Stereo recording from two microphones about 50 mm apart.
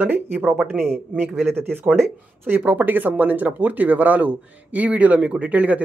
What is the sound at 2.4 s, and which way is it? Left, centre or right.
Speech, right.